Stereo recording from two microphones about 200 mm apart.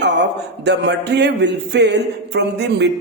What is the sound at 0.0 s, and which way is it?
Speech, 60° right (ahead or behind).